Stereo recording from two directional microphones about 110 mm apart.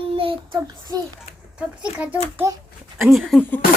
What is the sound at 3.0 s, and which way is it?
Speech, centre (ahead or behind).